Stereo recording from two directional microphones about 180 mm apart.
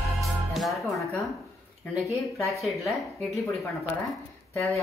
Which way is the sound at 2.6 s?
Centre (ahead or behind).